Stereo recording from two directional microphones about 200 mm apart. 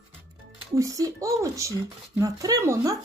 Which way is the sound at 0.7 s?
15° right (ahead or behind).